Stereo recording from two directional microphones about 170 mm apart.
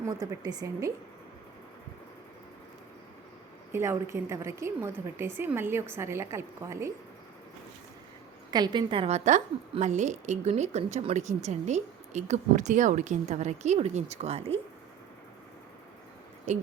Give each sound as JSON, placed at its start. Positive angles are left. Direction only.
{"t": 0.0, "sound": "speech", "side_deg": -20}
{"t": 3.7, "sound": "a woman's voice", "side_deg": -15}
{"t": 8.4, "sound": "a woman's voice", "side_deg": -25}
{"t": 16.5, "sound": "a woman's voice", "side_deg": -40}